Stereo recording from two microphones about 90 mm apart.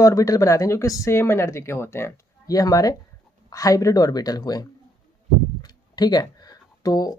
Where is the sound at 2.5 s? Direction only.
40° left (ahead or behind).